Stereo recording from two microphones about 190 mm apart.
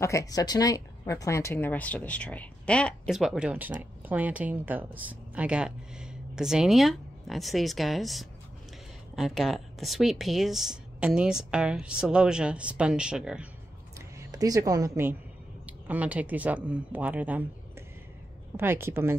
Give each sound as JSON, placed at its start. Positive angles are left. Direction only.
{"t": 0.0, "sound": "a woman's voice", "side_deg": 15}
{"t": 13.9, "sound": "speech", "side_deg": -15}